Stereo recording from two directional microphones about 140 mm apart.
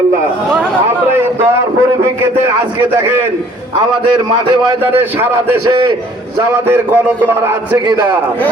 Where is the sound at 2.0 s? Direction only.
15° right (ahead or behind).